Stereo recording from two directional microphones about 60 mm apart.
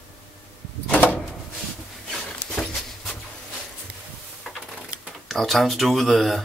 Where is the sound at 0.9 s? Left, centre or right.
Left.